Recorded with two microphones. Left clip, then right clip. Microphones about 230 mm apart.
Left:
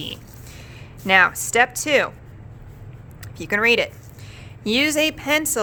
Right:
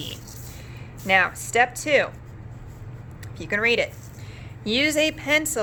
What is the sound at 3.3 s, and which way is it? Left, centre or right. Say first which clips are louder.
A woman's voice: left 4 dB; left.